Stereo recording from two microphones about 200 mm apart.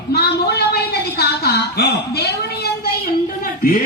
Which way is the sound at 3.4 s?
45° left (ahead or behind).